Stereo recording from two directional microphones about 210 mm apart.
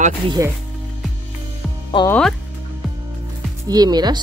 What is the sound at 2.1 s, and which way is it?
Speech, 5° left (ahead or behind).